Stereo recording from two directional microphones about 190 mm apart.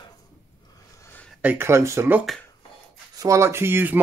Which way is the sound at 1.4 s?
15° right (ahead or behind).